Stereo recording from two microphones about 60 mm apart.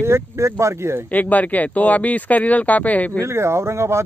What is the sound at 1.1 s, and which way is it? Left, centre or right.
Speech, left.